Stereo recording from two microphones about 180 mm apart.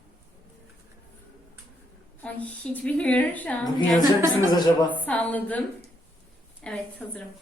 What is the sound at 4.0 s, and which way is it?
Speech, 20° right (ahead or behind).